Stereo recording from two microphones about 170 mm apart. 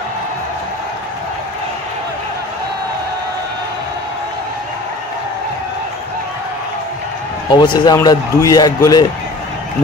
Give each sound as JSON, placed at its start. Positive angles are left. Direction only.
{"t": 7.5, "sound": "speech", "side_deg": 25}